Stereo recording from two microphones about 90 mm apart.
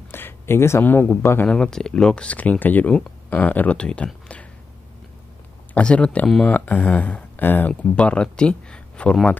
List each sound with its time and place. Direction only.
0.1 s speech: 25° left (ahead or behind)
1.5 s speech: 10° left (ahead or behind)
5.8 s speech: 10° left (ahead or behind)